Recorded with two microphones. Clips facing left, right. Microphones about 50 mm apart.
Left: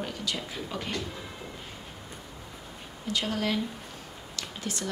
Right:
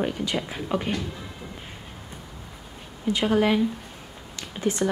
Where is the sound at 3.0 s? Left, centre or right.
Right.